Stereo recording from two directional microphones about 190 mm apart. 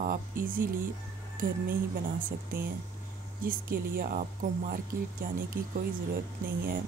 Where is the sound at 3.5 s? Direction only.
50° right (ahead or behind).